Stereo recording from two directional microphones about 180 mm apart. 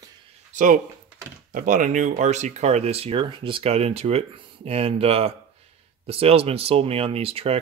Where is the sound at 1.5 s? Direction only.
45° right (ahead or behind).